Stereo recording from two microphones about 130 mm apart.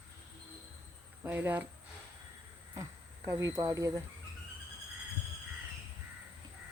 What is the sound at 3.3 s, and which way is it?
Speech, 25° right (ahead or behind).